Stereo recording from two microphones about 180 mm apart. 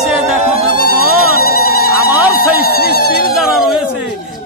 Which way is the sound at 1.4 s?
60° left (ahead or behind).